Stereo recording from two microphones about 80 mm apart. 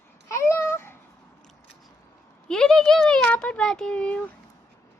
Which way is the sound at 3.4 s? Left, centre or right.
Centre.